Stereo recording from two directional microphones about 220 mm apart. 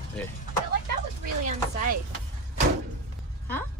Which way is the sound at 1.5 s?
35° right (ahead or behind).